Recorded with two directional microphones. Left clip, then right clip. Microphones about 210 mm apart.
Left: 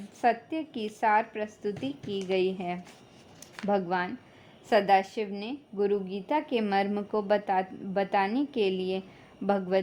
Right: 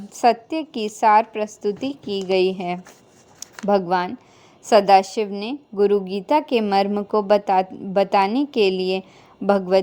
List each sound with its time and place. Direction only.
0.1 s a woman's voice: 25° right (ahead or behind)